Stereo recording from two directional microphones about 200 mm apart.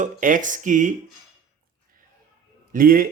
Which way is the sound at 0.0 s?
40° right (ahead or behind).